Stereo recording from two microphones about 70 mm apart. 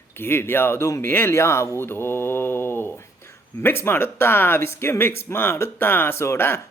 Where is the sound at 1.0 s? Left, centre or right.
Left.